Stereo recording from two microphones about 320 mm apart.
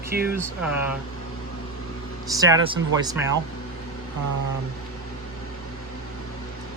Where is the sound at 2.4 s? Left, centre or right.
Centre.